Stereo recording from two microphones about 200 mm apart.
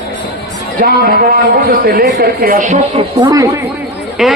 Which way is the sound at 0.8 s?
50° right (ahead or behind).